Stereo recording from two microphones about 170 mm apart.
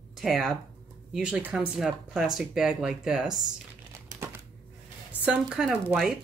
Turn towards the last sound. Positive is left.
turn(degrees=-5)  # may be behind; listen again after turning